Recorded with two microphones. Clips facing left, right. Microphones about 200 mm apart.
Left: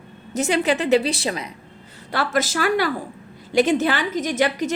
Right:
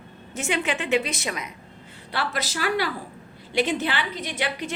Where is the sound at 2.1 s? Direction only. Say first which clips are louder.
Left 7 dB; 45° left (ahead or behind).